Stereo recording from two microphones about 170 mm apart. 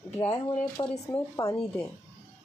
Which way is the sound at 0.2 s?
35° left (ahead or behind).